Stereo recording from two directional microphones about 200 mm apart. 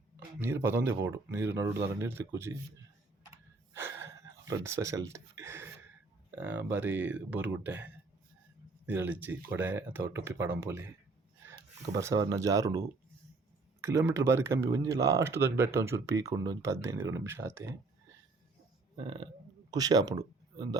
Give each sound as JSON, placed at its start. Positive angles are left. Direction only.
{"t": 0.3, "sound": "speech", "side_deg": -10}
{"t": 3.8, "sound": "gasp", "side_deg": -15}
{"t": 5.1, "sound": "speech", "side_deg": -10}
{"t": 13.8, "sound": "speech", "side_deg": -15}
{"t": 18.9, "sound": "speech", "side_deg": -25}